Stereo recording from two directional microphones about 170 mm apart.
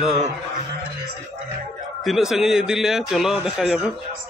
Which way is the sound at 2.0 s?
Centre (ahead or behind).